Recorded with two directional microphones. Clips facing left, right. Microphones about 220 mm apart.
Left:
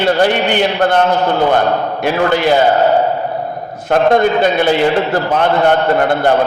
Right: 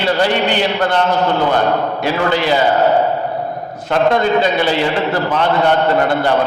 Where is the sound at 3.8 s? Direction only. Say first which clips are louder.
Left 3 dB; 50° left (ahead or behind).